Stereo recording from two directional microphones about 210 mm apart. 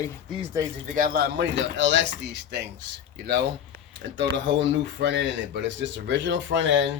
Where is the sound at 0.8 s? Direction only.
40° right (ahead or behind); by 6.9 s 60° right (ahead or behind).